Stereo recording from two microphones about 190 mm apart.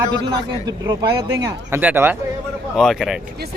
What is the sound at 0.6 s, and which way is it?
Speech, 20° right (ahead or behind).